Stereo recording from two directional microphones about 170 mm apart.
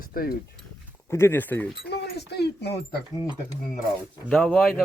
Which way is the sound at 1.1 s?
15° left (ahead or behind).